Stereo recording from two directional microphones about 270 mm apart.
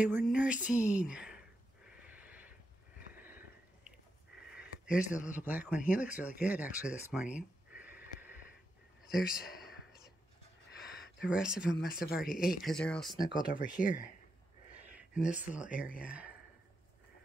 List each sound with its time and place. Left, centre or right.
0.0 s speech: centre
1.9 s a sound: centre
4.4 s speech: centre
11.1 s speech: centre
12.1 s speech: left
12.4 s speech: centre
13.5 s speech: left
15.0 s speech: centre